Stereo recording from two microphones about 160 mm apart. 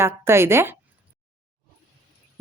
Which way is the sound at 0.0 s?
15° right (ahead or behind).